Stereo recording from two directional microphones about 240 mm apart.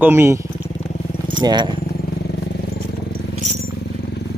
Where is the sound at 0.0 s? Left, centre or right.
Centre.